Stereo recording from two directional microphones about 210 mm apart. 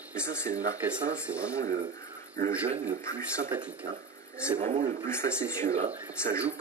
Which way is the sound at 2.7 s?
35° right (ahead or behind).